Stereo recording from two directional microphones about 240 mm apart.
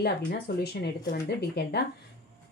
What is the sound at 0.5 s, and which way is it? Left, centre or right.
Speech, left.